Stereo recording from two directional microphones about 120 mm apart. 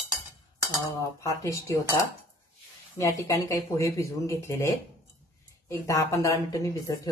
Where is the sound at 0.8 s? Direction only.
25° left (ahead or behind).